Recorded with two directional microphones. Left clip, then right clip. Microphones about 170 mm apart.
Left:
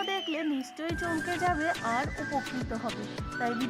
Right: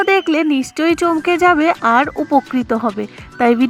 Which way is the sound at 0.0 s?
35° right (ahead or behind).